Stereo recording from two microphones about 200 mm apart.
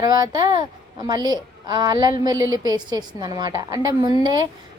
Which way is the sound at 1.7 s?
20° right (ahead or behind).